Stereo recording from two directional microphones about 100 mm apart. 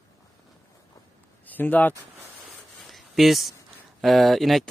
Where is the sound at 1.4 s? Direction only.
20° left (ahead or behind).